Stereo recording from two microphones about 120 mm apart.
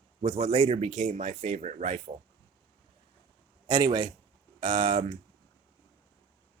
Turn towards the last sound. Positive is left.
turn(degrees=-45)  # may be behind; listen again after turning